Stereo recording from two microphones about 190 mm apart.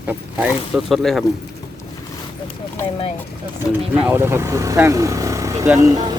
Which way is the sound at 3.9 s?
10° right (ahead or behind).